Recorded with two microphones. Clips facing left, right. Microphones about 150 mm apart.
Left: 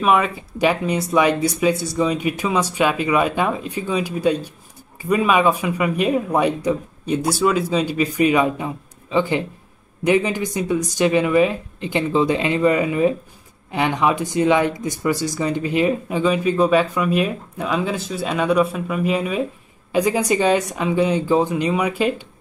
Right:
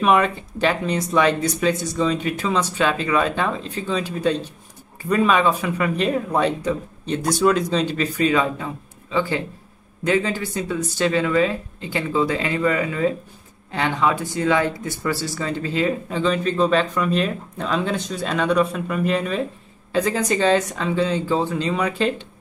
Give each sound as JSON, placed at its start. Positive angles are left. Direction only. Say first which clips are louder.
{"t": 0.0, "sound": "speech", "louder": "even", "side_deg": 5}